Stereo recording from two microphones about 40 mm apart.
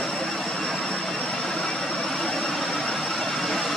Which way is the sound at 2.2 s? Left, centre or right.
Centre.